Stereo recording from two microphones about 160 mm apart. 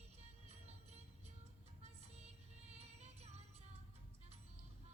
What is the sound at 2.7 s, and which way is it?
Music, 40° right (ahead or behind).